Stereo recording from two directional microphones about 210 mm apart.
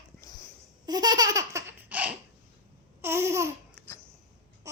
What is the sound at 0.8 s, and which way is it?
Laughter, 20° right (ahead or behind).